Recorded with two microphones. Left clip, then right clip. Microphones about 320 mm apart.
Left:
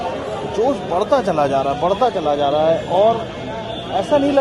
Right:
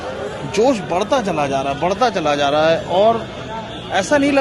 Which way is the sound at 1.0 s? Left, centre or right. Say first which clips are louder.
Left 2 dB; right.